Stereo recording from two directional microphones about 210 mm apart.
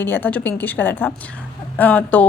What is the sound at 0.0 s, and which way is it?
A woman's voice, 10° left (ahead or behind).